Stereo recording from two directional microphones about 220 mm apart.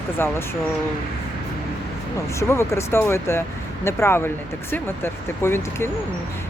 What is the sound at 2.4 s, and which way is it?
Speech, 10° left (ahead or behind).